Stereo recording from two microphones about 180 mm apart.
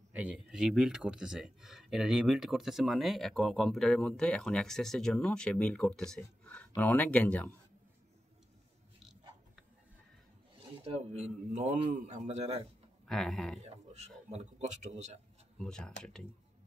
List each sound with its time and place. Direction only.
0.1 s speech: 5° right (ahead or behind)
10.5 s rub: 30° right (ahead or behind)
11.5 s speech: 40° right (ahead or behind)
13.0 s speech: centre (ahead or behind)
13.6 s speech: 35° right (ahead or behind)
15.5 s speech: 5° left (ahead or behind)